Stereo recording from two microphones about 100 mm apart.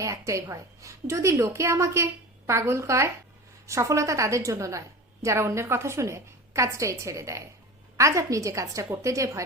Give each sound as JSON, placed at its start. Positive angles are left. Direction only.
{"t": 0.0, "sound": "a woman's voice", "side_deg": -30}